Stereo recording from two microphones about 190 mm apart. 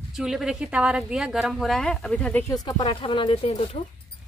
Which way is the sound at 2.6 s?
25° left (ahead or behind).